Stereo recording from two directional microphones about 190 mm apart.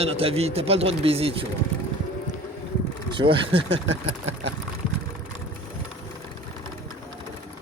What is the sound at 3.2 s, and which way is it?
Speech, 25° right (ahead or behind).